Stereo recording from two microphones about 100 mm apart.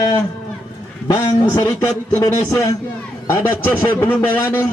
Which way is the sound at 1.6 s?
35° left (ahead or behind).